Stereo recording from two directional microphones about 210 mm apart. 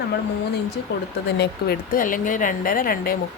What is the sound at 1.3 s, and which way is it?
Speech, 50° left (ahead or behind).